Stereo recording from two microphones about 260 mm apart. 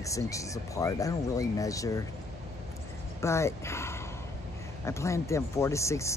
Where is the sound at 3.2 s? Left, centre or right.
Centre.